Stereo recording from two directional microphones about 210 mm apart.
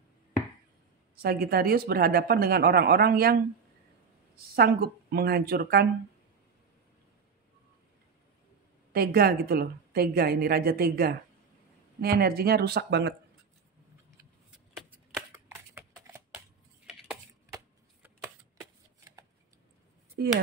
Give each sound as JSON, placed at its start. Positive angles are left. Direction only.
{"t": 1.1, "sound": "a woman's voice", "side_deg": -45}
{"t": 4.5, "sound": "a woman's voice", "side_deg": -45}
{"t": 8.9, "sound": "a woman's voice", "side_deg": -45}
{"t": 14.5, "sound": "shuffling cards", "side_deg": 0}
{"t": 15.7, "sound": "typing", "side_deg": -10}
{"t": 18.6, "sound": "shuffling cards", "side_deg": -15}